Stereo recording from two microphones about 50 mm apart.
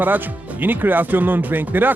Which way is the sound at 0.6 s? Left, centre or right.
Right.